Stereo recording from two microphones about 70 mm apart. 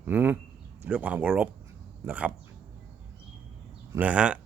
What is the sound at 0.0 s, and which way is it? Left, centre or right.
Speech, right.